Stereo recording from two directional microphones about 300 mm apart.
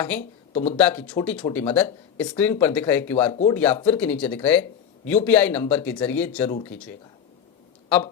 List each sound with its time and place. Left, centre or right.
0.2 s speech: left
0.8 s speech: centre